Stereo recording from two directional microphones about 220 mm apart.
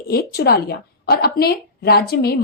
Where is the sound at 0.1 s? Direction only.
45° left (ahead or behind).